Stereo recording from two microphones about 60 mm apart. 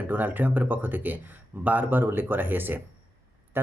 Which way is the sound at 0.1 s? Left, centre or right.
Right.